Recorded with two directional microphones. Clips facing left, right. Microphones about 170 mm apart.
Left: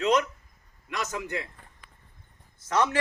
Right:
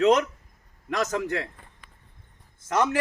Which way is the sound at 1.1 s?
75° right (ahead or behind).